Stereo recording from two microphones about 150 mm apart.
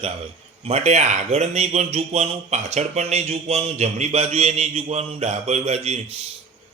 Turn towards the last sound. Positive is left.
turn(degrees=-45)  # may be behind; listen again after turning